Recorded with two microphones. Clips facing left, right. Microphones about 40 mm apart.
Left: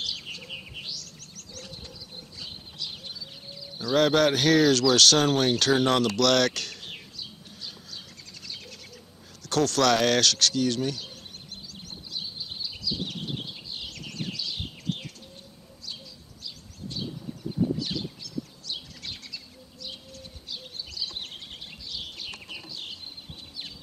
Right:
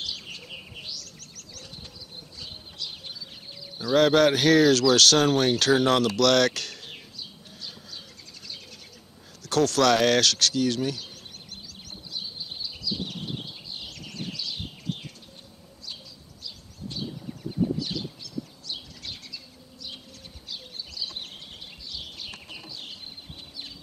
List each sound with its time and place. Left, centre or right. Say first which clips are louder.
0.4 s bird: left 2 dB; centre
1.2 s bird: left 1 dB; centre
3.7 s speech: right 2 dB; centre
9.4 s speech: right 2 dB; centre
11.5 s a sound: left 2 dB; centre
14.0 s bird: even; centre
21.0 s a sound: even; centre